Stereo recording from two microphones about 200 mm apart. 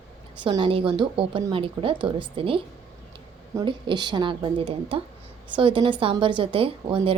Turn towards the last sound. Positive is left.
turn(degrees=-25)  # may be behind; listen again after turning